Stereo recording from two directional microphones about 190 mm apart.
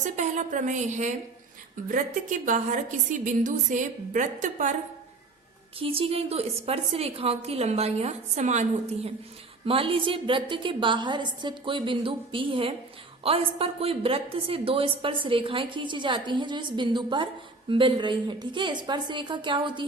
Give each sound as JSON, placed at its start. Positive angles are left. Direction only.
{"t": 0.0, "sound": "a woman's voice", "side_deg": -40}
{"t": 5.8, "sound": "a woman's voice", "side_deg": -30}
{"t": 9.6, "sound": "a woman's voice", "side_deg": -30}